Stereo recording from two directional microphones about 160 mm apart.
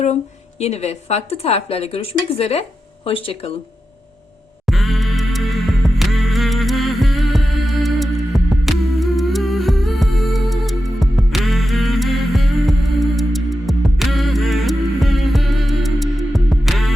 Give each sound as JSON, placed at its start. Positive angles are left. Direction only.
{"t": 0.6, "sound": "a woman's voice", "side_deg": 40}
{"t": 4.6, "sound": "music", "side_deg": 0}